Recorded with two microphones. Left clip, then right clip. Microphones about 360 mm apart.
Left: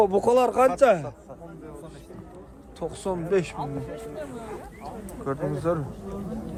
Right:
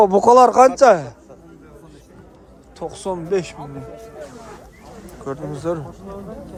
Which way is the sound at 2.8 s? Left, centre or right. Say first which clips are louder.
Right 4 dB; centre.